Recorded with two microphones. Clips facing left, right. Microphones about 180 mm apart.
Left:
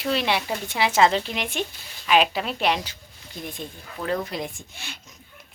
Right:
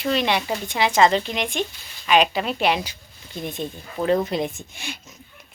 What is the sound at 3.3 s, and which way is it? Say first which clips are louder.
Speech: right 6 dB; 20° right (ahead or behind).